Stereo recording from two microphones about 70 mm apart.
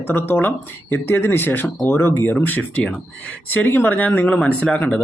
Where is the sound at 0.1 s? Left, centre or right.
Left.